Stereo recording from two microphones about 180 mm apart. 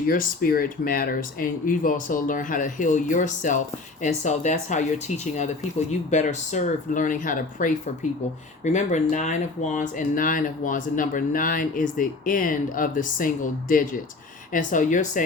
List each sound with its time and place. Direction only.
0.1 s speech: 55° left (ahead or behind)